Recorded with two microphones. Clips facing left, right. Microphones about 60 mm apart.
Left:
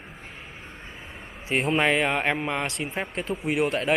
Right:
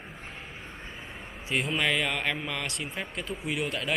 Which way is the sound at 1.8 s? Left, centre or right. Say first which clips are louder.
Left 6 dB; left.